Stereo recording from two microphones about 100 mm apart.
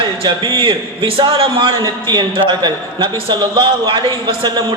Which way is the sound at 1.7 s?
45° right (ahead or behind).